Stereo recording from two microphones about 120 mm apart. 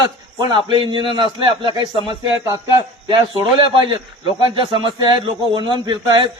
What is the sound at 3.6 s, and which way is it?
A man's voice, 45° right (ahead or behind).